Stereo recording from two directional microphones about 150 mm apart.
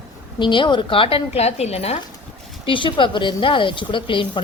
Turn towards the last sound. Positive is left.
turn(degrees=35)  # may be behind; listen again after turning